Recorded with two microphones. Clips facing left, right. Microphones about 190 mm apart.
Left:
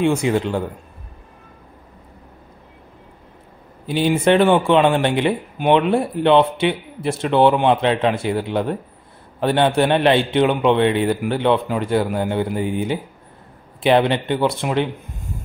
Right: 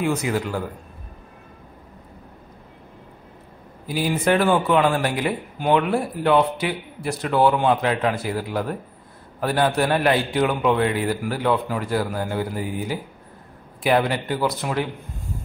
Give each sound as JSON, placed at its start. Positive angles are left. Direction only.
{"t": 0.0, "sound": "speech", "side_deg": 25}
{"t": 3.8, "sound": "speech", "side_deg": 25}